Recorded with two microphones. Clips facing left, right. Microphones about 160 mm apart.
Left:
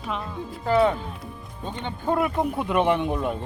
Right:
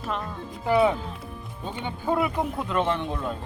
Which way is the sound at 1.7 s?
5° right (ahead or behind).